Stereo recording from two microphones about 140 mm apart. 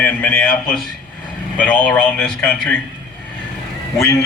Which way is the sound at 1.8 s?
10° left (ahead or behind).